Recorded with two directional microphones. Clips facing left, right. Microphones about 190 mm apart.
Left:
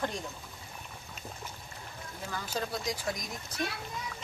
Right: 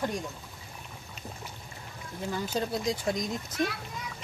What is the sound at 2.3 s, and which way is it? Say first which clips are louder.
Speech: right 4 dB; 25° right (ahead or behind).